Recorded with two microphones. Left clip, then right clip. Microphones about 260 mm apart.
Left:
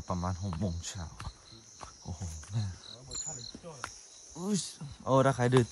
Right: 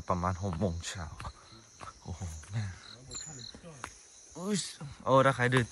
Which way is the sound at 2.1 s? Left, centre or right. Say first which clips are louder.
Left 1 dB; centre.